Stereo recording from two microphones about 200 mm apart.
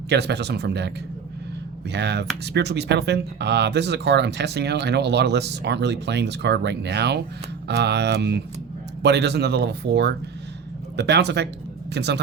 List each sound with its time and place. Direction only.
0.1 s speech: 55° right (ahead or behind)